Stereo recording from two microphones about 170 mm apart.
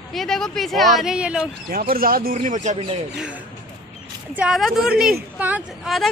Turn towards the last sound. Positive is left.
turn(degrees=-10)  # may be behind; listen again after turning